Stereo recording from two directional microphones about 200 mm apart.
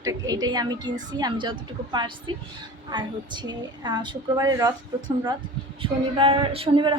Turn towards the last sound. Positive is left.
turn(degrees=-25)  # may be behind; listen again after turning